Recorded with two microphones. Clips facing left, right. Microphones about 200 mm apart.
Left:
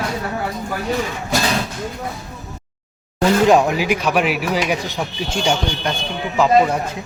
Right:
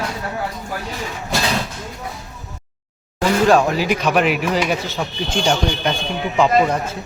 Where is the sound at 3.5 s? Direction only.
15° left (ahead or behind).